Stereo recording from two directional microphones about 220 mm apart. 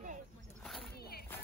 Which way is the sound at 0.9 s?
45° left (ahead or behind).